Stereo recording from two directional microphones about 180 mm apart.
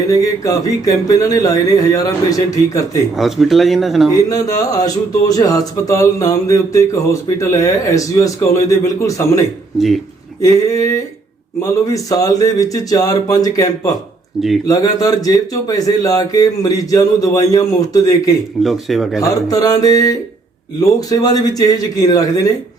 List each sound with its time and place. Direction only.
0.1 s a man's voice: 20° left (ahead or behind)
3.2 s speech: centre (ahead or behind)
4.3 s a man's voice: 20° left (ahead or behind)
5.3 s a sound: 20° left (ahead or behind)
9.7 s speech: centre (ahead or behind)
10.4 s a man's voice: 20° left (ahead or behind)
12.0 s a man's voice: 20° left (ahead or behind)
18.6 s speech: centre (ahead or behind)
19.2 s a man's voice: 20° left (ahead or behind)